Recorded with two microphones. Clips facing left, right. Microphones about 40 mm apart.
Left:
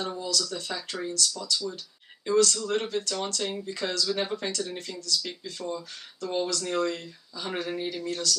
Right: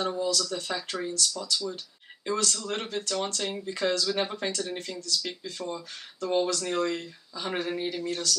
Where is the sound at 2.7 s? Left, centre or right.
Centre.